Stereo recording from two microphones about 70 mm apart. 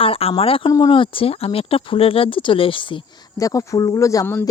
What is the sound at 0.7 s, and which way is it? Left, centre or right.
Speech, left.